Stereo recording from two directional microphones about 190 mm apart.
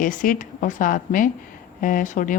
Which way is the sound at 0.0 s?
45° left (ahead or behind).